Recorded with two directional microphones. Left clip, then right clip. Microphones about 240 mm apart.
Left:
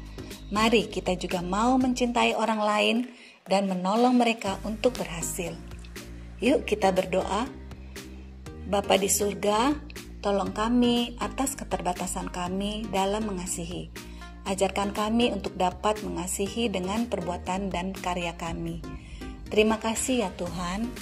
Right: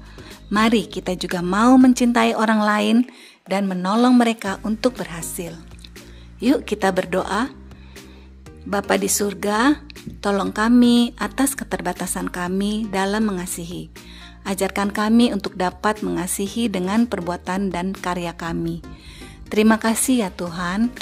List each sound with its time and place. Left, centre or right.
0.6 s a woman's voice: centre
6.5 s a woman's voice: right
8.6 s a woman's voice: right
12.5 s a woman's voice: right
12.9 s a woman's voice: right
13.5 s a woman's voice: right
14.4 s a woman's voice: right
16.3 s a woman's voice: right
16.7 s a woman's voice: right
19.7 s a woman's voice: right